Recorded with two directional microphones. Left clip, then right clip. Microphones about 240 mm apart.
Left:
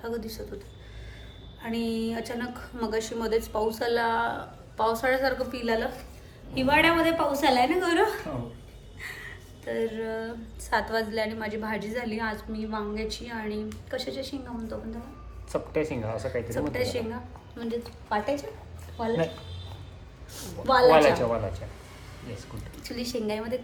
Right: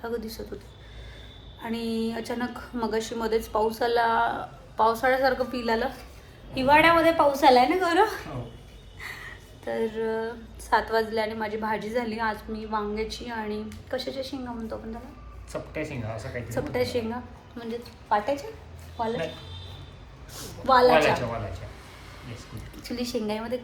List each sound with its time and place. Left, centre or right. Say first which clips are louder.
1.6 s a woman's voice: right 1 dB; centre
15.5 s speech: left 5 dB; left
16.5 s a woman's voice: right 5 dB; centre
20.3 s a woman's voice: right 2 dB; centre
22.8 s a woman's voice: right 2 dB; centre